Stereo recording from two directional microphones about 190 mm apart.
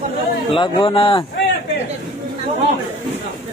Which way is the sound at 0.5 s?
30° left (ahead or behind).